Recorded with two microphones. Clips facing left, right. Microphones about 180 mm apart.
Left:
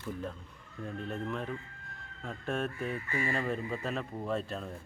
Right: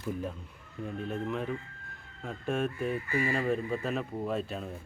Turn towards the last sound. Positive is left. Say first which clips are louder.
# right 2 dB
turn(degrees=-5)  # may be behind; listen again after turning